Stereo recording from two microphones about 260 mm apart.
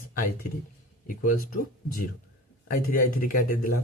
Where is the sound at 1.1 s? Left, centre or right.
Left.